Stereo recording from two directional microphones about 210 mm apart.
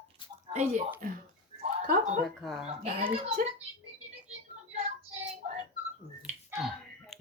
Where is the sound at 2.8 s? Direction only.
30° right (ahead or behind).